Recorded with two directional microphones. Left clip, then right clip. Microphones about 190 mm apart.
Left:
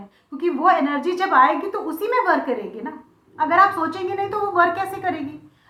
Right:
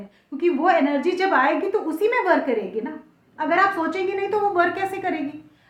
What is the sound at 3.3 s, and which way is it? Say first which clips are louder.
A woman's voice: left 3 dB; 35° right (ahead or behind).